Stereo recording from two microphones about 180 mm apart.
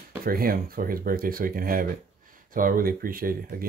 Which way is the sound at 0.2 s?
55° right (ahead or behind).